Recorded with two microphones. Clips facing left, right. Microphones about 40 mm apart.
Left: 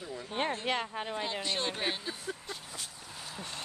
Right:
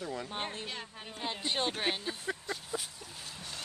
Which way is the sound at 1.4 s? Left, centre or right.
Centre.